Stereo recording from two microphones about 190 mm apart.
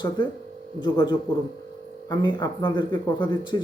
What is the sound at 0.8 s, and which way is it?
Speech, 25° left (ahead or behind).